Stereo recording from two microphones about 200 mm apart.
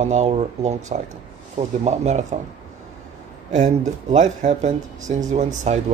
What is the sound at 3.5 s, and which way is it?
Speech, 35° right (ahead or behind).